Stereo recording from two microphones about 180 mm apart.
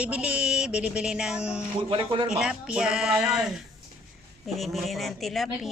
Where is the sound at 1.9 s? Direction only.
25° right (ahead or behind).